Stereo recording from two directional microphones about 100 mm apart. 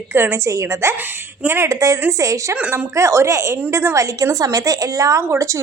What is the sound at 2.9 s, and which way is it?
A woman's voice, 30° right (ahead or behind).